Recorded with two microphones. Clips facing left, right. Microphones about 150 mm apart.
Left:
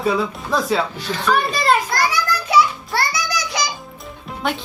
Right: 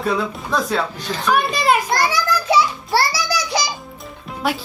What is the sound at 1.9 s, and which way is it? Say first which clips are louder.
Music: right 1 dB; 25° right (ahead or behind).